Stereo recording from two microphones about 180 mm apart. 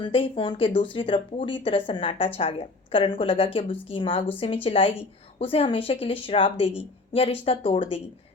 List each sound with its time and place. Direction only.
0.0 s a woman's voice: 30° left (ahead or behind)